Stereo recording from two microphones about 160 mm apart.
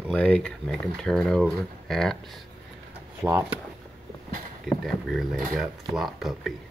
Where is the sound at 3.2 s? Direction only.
15° right (ahead or behind).